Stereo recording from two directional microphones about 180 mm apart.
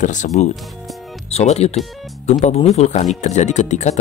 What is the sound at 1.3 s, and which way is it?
Speech, 35° left (ahead or behind).